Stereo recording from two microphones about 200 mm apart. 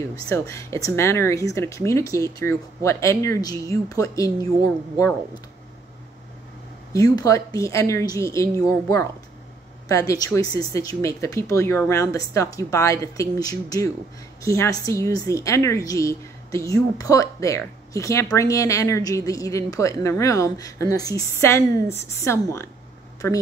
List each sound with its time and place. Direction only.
0.3 s a woman's voice: 15° left (ahead or behind)
6.9 s a woman's voice: 15° left (ahead or behind)